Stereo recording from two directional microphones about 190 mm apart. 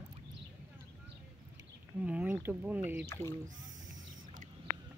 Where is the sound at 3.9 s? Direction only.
45° right (ahead or behind).